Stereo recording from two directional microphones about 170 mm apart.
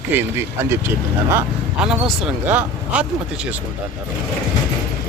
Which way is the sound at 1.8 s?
5° right (ahead or behind).